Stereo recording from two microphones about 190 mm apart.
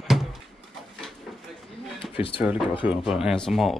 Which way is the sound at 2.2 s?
30° left (ahead or behind).